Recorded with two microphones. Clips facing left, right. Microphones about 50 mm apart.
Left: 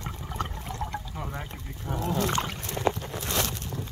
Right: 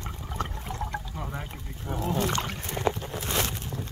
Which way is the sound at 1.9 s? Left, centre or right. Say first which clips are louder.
Even; right.